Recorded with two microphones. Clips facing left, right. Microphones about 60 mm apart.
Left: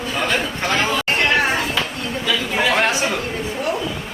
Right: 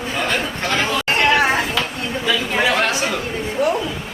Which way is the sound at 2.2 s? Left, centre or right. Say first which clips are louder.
Right 1 dB; right.